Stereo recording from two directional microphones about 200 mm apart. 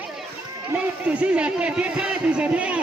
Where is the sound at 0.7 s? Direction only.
5° right (ahead or behind).